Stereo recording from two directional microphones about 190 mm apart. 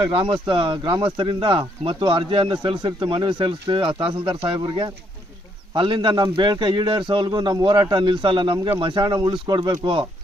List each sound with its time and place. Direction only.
0.1 s speech: 30° right (ahead or behind)